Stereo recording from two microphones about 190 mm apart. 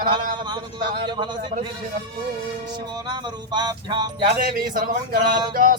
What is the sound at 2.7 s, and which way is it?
Music, 20° right (ahead or behind).